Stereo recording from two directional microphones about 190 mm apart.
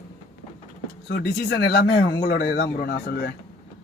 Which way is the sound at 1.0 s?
55° left (ahead or behind).